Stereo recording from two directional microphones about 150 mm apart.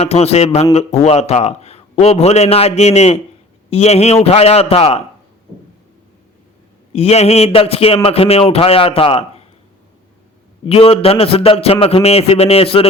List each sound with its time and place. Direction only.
0.0 s a man's voice: 45° left (ahead or behind)
6.9 s a man's voice: 45° left (ahead or behind)
10.7 s a man's voice: 40° left (ahead or behind)